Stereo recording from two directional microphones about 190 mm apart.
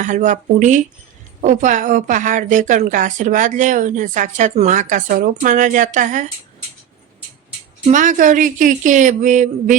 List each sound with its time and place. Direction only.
0.0 s a woman's voice: 40° right (ahead or behind)
7.9 s a woman's voice: 40° right (ahead or behind)